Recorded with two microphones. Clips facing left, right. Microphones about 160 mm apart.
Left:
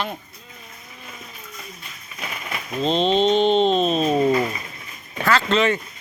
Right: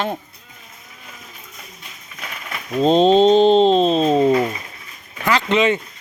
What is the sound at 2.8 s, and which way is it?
Speech, 45° right (ahead or behind).